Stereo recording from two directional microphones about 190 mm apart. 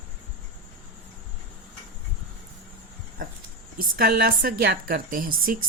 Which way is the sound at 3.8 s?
50° right (ahead or behind).